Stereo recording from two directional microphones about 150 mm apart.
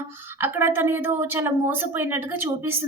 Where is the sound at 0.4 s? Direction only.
15° right (ahead or behind).